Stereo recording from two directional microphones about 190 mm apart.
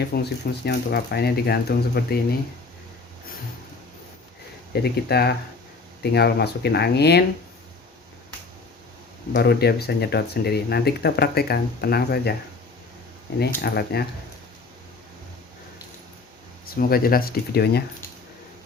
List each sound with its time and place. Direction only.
0.1 s speech: 55° left (ahead or behind)
4.7 s speech: 55° left (ahead or behind)
9.3 s speech: 60° left (ahead or behind)
13.6 s speech: 55° left (ahead or behind)
16.6 s speech: 50° left (ahead or behind)